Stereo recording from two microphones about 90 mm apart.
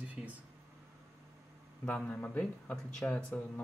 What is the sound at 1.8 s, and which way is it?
Speech, 15° left (ahead or behind).